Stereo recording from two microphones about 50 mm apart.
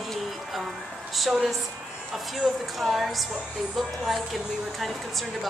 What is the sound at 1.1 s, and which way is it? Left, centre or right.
Speech, centre.